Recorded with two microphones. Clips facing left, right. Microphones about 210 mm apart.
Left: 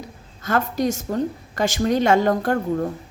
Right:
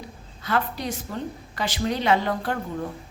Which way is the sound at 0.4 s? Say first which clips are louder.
Left 5 dB; 45° left (ahead or behind).